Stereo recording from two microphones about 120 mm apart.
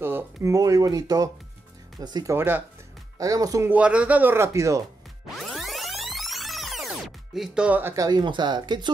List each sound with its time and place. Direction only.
0.0 s speech: 15° right (ahead or behind); by 2.3 s 35° right (ahead or behind)
2.3 s speech: 15° right (ahead or behind)
3.2 s speech: 30° right (ahead or behind)
3.7 s speech: 10° right (ahead or behind); by 4.8 s 25° right (ahead or behind)
5.4 s music: centre (ahead or behind)
7.3 s speech: 5° right (ahead or behind)
7.9 s speech: 35° right (ahead or behind)